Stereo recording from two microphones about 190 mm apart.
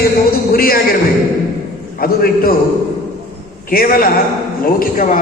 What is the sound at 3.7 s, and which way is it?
A man's voice, 50° left (ahead or behind).